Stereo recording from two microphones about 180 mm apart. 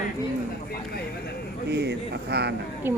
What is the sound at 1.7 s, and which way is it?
Speech, 65° right (ahead or behind).